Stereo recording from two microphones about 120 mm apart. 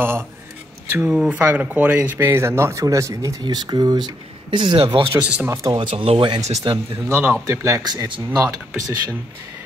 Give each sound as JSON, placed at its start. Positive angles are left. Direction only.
{"t": 0.9, "sound": "speech", "side_deg": -10}
{"t": 5.1, "sound": "speech", "side_deg": -15}
{"t": 5.5, "sound": "speech", "side_deg": -30}
{"t": 5.8, "sound": "speech", "side_deg": -45}
{"t": 7.1, "sound": "speech", "side_deg": -20}